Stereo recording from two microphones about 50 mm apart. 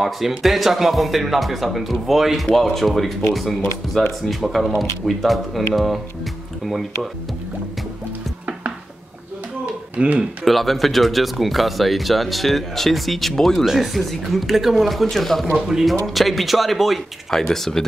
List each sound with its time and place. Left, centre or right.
0.0 s speech: centre
6.6 s speech: centre
9.9 s speech: right
10.4 s speech: centre